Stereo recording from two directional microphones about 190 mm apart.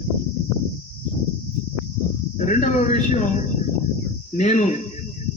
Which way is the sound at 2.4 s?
40° left (ahead or behind).